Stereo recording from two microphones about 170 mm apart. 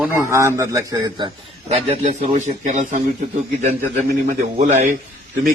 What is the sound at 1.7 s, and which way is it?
A man's voice, 40° right (ahead or behind).